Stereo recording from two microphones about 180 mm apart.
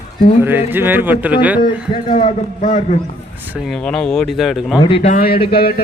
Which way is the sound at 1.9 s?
30° left (ahead or behind).